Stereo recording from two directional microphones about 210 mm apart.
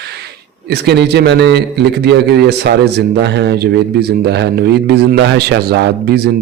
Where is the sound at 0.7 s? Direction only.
50° right (ahead or behind).